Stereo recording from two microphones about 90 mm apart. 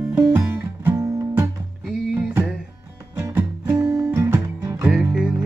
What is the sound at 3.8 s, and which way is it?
Music, 35° right (ahead or behind).